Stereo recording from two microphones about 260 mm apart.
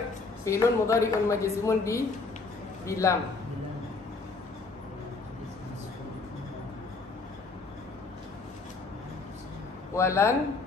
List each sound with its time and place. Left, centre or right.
0.5 s speech: centre
9.9 s speech: centre